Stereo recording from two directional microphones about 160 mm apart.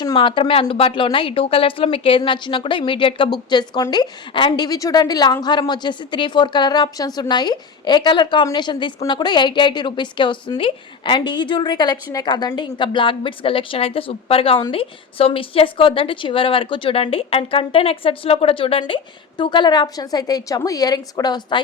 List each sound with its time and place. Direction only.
0.0 s a woman's voice: 30° left (ahead or behind)